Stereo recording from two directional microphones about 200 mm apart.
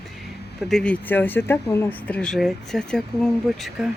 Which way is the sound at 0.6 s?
Centre (ahead or behind).